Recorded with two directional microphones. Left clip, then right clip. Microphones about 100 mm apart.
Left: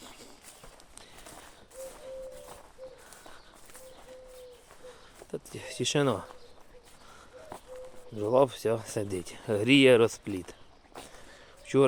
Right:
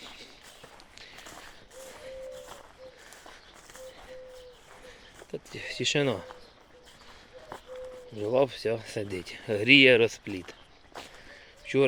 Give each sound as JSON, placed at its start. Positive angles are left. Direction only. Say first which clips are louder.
{"t": 1.8, "sound": "tap", "louder": "left 4 dB", "side_deg": -15}
{"t": 4.9, "sound": "speech", "louder": "even", "side_deg": 20}
{"t": 8.1, "sound": "speech", "louder": "left 1 dB", "side_deg": 35}
{"t": 10.2, "sound": "speech", "louder": "left 1 dB", "side_deg": 45}
{"t": 11.3, "sound": "a sound", "louder": "left 1 dB", "side_deg": 50}